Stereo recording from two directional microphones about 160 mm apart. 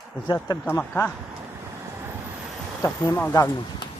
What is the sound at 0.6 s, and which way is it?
Speech, 15° left (ahead or behind).